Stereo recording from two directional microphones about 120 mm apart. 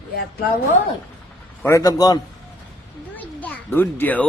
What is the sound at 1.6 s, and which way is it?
Speech, 30° left (ahead or behind).